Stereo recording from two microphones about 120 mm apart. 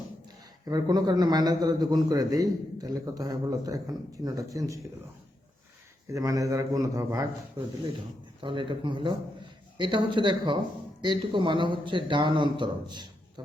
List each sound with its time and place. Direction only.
0.6 s a man's voice: 35° right (ahead or behind)
6.1 s a man's voice: 25° right (ahead or behind)
8.4 s a man's voice: 45° right (ahead or behind)